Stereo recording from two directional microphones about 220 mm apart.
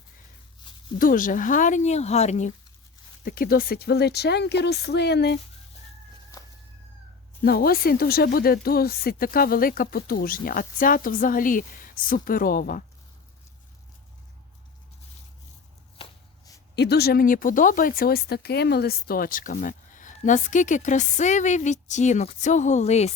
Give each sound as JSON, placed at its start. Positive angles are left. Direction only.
{"t": 0.9, "sound": "speech", "side_deg": 40}
{"t": 3.2, "sound": "speech", "side_deg": 40}
{"t": 7.4, "sound": "speech", "side_deg": 45}
{"t": 16.7, "sound": "speech", "side_deg": 50}